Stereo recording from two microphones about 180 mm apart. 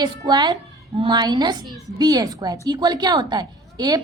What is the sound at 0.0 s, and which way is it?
A woman's voice, 25° right (ahead or behind).